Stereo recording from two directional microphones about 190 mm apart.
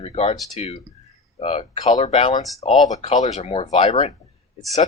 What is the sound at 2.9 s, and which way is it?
Speech, 40° left (ahead or behind).